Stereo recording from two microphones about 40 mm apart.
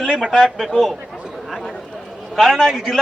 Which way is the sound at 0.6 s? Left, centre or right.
Centre.